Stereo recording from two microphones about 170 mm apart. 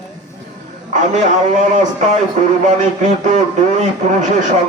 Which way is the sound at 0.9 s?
45° right (ahead or behind).